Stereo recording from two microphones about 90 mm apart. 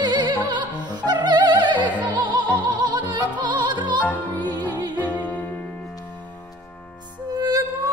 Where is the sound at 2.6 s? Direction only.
60° right (ahead or behind).